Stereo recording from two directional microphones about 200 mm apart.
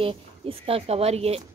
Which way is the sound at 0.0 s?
25° right (ahead or behind).